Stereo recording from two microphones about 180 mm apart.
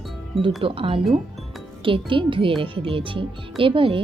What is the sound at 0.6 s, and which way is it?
Speech, 30° right (ahead or behind).